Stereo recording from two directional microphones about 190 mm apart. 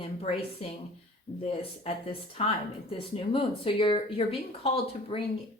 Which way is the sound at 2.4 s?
30° left (ahead or behind).